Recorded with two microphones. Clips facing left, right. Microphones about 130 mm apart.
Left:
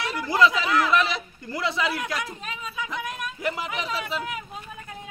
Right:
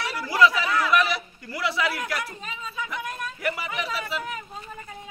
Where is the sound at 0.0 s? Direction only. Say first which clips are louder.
Even; 20° left (ahead or behind).